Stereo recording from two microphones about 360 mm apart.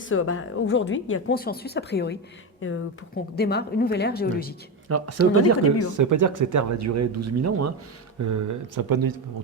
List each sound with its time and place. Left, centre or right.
0.1 s speech: left
4.9 s speech: right
6.0 s speech: right